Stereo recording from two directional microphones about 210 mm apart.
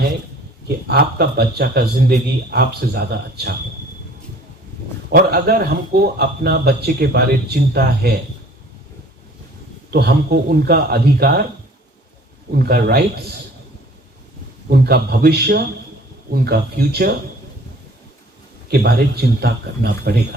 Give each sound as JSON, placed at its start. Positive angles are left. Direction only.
{"t": 0.9, "sound": "a man's voice", "side_deg": -50}
{"t": 5.1, "sound": "a man's voice", "side_deg": -45}
{"t": 9.9, "sound": "a man's voice", "side_deg": -50}
{"t": 12.6, "sound": "a man's voice", "side_deg": -50}
{"t": 14.7, "sound": "a man's voice", "side_deg": -50}
{"t": 18.7, "sound": "a man's voice", "side_deg": -50}